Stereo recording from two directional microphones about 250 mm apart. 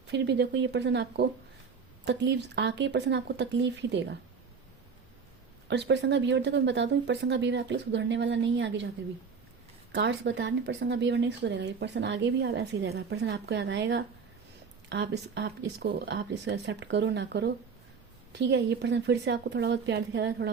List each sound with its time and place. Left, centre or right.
0.1 s speech: right
5.6 s speech: right
9.9 s speech: right